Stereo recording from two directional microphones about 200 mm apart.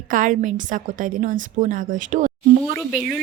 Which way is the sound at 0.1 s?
40° right (ahead or behind).